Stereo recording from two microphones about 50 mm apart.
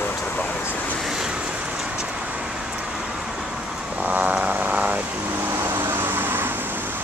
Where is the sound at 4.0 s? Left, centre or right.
Right.